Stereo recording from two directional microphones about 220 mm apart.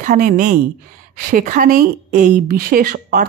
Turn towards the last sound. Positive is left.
turn(degrees=-40)  # may be behind; listen again after turning